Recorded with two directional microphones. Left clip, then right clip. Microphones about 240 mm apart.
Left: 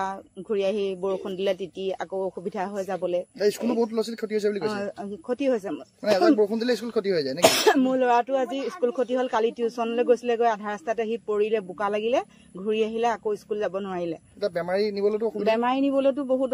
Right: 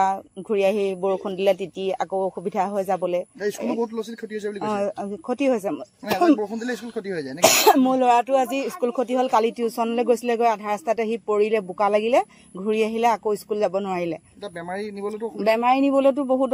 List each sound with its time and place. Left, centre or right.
0.0 s speech: right
3.3 s speech: left
4.6 s speech: right
6.6 s speech: left
7.4 s speech: right
14.7 s speech: left
15.3 s speech: right